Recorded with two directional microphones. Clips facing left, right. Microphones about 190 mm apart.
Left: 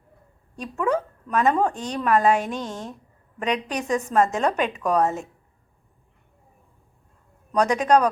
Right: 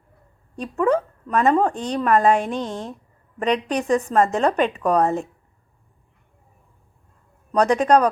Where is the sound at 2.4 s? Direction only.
35° right (ahead or behind).